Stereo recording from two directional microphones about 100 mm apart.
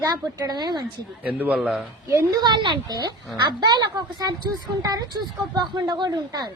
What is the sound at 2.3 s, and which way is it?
Speech, 45° right (ahead or behind).